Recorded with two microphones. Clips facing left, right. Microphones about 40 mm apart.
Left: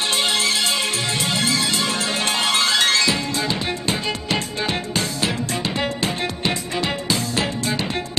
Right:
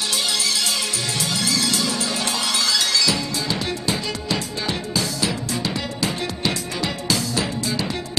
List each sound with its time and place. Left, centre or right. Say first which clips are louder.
0.1 s music: left 3 dB; left
1.9 s music: left 2 dB; left